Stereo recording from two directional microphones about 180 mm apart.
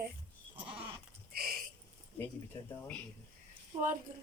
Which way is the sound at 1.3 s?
55° right (ahead or behind).